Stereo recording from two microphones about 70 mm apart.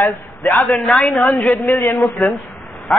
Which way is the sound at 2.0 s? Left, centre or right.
Centre.